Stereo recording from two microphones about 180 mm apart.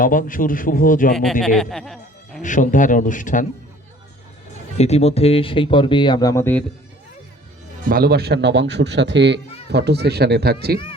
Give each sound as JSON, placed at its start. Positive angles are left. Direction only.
{"t": 0.0, "sound": "a man's voice", "side_deg": 50}
{"t": 1.1, "sound": "a man's voice", "side_deg": 5}
{"t": 2.4, "sound": "a man's voice", "side_deg": 45}
{"t": 4.8, "sound": "speech", "side_deg": 35}
{"t": 7.9, "sound": "speech", "side_deg": -55}